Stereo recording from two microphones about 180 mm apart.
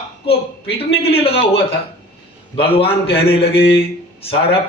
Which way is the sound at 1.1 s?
30° left (ahead or behind).